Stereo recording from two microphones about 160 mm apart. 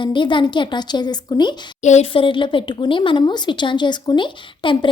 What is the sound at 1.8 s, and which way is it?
Speech, 45° left (ahead or behind).